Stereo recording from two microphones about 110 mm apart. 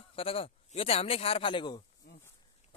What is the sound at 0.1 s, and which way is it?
A man's voice, 60° left (ahead or behind).